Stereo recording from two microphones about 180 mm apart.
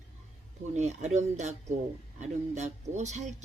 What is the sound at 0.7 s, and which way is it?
Speech, 40° right (ahead or behind).